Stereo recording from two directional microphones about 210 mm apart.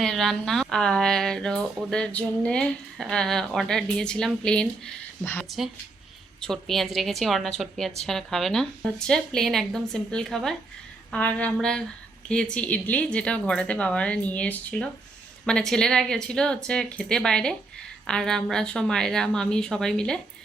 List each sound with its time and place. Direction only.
0.0 s speech: centre (ahead or behind)